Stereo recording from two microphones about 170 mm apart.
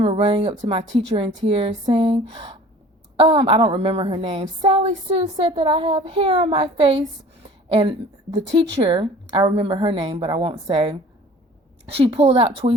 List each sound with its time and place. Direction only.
0.0 s a woman's voice: 35° right (ahead or behind)